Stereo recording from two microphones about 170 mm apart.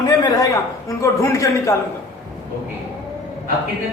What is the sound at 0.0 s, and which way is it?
A man's voice, 25° left (ahead or behind).